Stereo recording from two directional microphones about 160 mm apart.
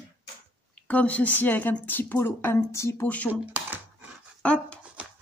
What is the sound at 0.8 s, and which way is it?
A woman's voice, 10° left (ahead or behind).